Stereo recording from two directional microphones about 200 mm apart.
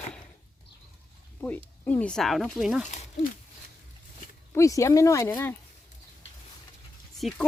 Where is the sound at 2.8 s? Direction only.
35° left (ahead or behind).